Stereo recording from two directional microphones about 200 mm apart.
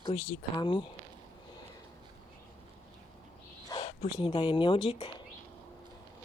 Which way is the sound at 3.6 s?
20° left (ahead or behind).